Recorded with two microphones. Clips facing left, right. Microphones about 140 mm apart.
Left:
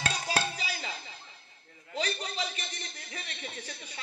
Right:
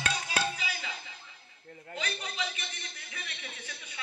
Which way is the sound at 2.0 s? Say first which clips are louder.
Left 3 dB; 35° left (ahead or behind).